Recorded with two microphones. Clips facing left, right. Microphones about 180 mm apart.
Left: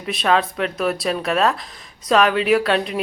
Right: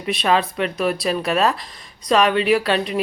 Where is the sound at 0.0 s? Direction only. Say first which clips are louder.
Even; centre (ahead or behind).